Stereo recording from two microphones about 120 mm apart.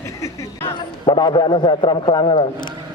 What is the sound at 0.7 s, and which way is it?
A man's voice, 40° left (ahead or behind).